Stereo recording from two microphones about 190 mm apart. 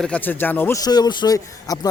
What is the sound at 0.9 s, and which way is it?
Speech, 20° left (ahead or behind).